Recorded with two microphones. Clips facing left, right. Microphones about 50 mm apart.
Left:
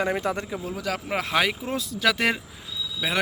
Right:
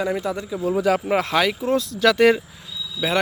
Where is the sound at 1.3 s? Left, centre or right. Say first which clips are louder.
Right 2 dB; centre.